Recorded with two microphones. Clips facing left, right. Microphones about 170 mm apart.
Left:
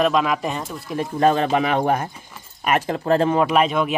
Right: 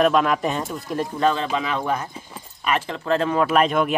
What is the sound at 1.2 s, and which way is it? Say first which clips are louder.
Speech: left 5 dB; 50° left (ahead or behind).